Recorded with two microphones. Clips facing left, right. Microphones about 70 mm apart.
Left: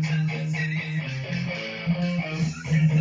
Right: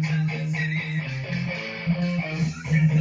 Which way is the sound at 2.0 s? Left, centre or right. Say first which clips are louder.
Right 1 dB; right.